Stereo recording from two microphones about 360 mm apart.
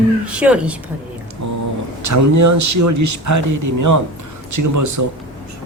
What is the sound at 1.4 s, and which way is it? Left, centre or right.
Speech, right.